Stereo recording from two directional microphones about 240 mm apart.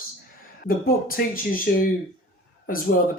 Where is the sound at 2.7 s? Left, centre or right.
Left.